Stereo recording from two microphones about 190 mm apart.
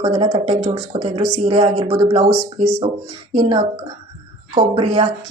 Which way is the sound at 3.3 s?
25° right (ahead or behind).